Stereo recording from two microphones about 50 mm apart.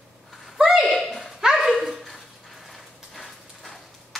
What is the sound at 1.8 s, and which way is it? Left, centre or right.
Dog, centre.